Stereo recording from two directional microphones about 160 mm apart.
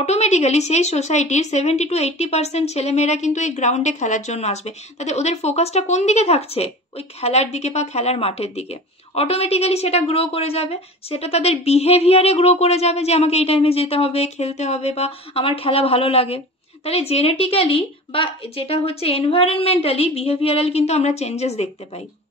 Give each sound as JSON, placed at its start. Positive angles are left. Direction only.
{"t": 0.0, "sound": "a woman's voice", "side_deg": 45}